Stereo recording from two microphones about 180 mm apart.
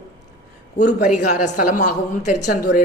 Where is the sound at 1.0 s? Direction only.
45° left (ahead or behind).